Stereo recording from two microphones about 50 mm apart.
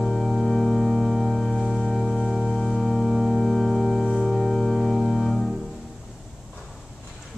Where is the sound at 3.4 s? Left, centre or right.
Centre.